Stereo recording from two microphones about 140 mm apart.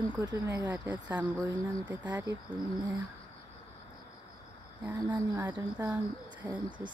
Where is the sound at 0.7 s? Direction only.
10° right (ahead or behind).